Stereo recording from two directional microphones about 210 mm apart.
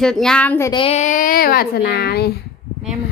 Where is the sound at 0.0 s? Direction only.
5° left (ahead or behind).